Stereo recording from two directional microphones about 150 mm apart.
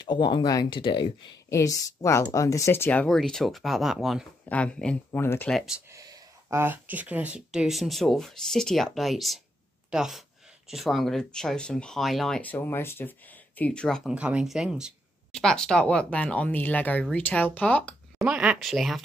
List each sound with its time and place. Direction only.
0.0 s speech: 30° left (ahead or behind)
1.5 s speech: 20° left (ahead or behind)
5.5 s speech: centre (ahead or behind)
5.9 s speech: 25° right (ahead or behind); by 14.1 s 5° left (ahead or behind)
14.1 s speech: 5° right (ahead or behind); by 17.9 s 10° left (ahead or behind)
18.2 s speech: 5° right (ahead or behind)